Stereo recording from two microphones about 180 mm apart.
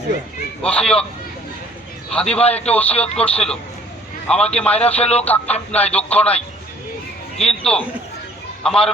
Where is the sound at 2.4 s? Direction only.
35° left (ahead or behind).